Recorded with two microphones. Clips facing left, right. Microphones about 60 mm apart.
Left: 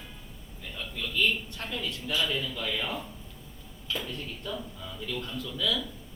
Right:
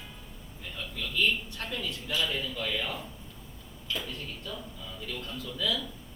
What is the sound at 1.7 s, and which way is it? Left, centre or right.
Speech, left.